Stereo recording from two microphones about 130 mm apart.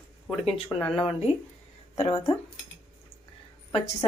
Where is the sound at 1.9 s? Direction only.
50° left (ahead or behind).